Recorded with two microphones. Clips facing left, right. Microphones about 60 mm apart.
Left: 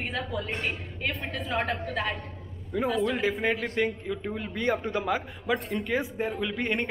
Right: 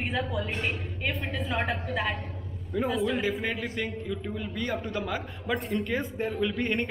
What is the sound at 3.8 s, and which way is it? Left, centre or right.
Speech, centre.